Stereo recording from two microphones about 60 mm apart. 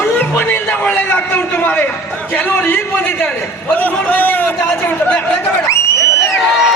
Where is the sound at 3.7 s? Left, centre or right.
Left.